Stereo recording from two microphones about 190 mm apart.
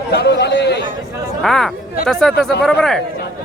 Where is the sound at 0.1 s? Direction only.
60° left (ahead or behind).